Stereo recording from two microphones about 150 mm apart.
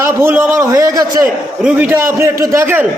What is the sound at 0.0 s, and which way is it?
A man's voice, 15° right (ahead or behind).